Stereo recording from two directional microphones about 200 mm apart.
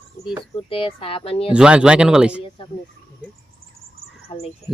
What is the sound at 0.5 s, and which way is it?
Speech, 30° left (ahead or behind).